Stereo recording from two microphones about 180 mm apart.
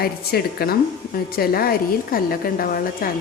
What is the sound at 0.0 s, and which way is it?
A woman's voice, 60° left (ahead or behind).